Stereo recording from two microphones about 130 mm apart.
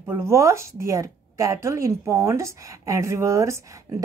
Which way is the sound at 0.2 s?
20° right (ahead or behind).